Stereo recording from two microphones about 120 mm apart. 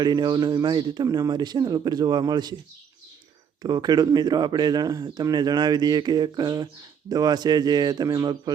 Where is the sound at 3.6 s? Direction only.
35° right (ahead or behind).